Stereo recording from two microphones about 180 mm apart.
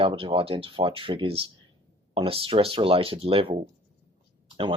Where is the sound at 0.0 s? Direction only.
30° right (ahead or behind).